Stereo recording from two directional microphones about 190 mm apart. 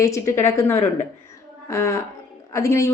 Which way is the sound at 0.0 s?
15° left (ahead or behind).